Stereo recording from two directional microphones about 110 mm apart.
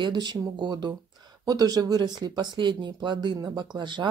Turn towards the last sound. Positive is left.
turn(degrees=-45)  # may be behind; listen again after turning